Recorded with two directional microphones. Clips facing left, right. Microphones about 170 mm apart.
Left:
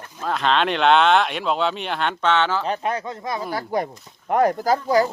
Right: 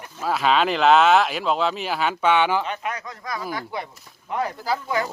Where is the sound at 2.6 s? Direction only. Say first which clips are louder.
Left 5 dB; 35° left (ahead or behind).